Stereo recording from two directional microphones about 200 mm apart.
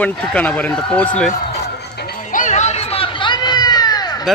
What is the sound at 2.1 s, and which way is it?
Music, 40° left (ahead or behind).